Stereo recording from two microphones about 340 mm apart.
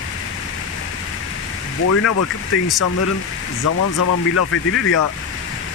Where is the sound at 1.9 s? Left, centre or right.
Left.